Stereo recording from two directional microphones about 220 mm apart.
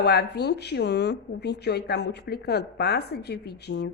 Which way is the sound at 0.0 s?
45° left (ahead or behind).